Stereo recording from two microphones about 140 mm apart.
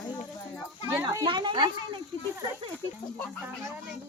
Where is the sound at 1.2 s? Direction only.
35° right (ahead or behind).